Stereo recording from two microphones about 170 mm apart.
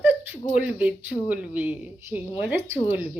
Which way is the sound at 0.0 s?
10° right (ahead or behind).